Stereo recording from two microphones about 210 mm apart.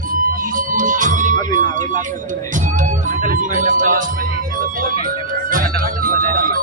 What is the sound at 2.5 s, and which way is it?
Music, 35° right (ahead or behind).